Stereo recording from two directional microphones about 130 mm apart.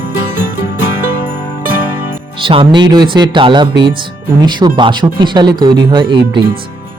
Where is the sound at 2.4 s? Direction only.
40° right (ahead or behind).